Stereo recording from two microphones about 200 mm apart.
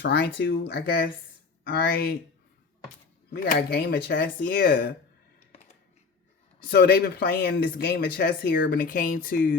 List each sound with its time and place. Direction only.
0.0 s speech: 55° left (ahead or behind)
3.2 s speech: 50° left (ahead or behind)
6.7 s speech: 50° left (ahead or behind)